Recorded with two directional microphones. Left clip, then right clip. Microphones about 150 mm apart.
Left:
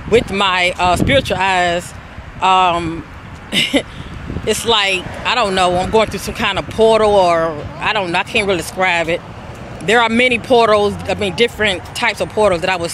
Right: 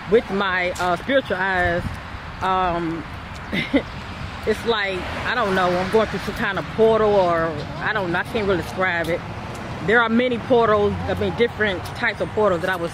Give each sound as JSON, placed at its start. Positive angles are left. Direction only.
{"t": 0.1, "sound": "speech", "side_deg": 20}
{"t": 4.5, "sound": "speech", "side_deg": 20}